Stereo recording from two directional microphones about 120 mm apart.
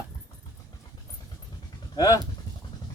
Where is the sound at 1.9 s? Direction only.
30° left (ahead or behind).